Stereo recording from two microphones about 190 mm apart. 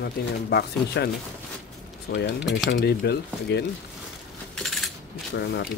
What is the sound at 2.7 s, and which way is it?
Speech, 55° left (ahead or behind).